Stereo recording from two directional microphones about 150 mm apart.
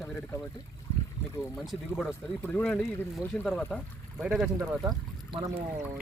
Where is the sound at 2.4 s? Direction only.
10° left (ahead or behind).